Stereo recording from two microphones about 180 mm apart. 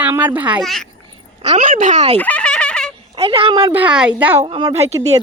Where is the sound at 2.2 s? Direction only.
10° left (ahead or behind).